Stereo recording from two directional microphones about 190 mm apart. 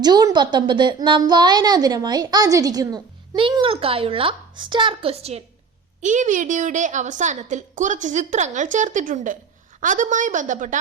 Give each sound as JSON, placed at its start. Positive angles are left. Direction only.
{"t": 0.0, "sound": "a woman's voice", "side_deg": -20}